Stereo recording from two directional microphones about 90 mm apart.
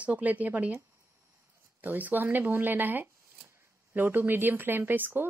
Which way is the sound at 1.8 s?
20° right (ahead or behind).